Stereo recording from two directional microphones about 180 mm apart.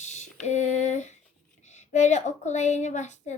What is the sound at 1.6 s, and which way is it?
A woman's voice, 40° left (ahead or behind).